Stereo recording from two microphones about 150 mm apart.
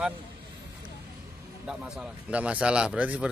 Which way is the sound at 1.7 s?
5° right (ahead or behind).